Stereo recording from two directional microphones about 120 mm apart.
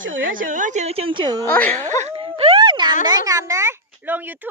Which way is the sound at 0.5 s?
80° right.